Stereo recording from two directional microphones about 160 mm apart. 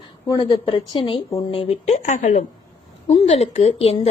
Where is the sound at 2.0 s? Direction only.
50° left (ahead or behind).